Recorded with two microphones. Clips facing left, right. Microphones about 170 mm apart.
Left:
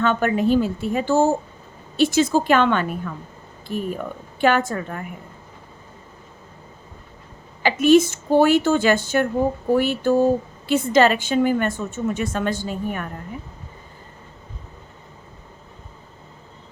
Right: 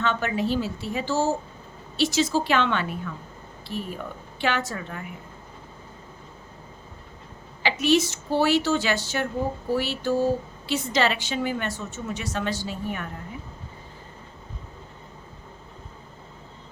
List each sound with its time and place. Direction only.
0.0 s a woman's voice: 50° left (ahead or behind)
7.6 s a woman's voice: 50° left (ahead or behind)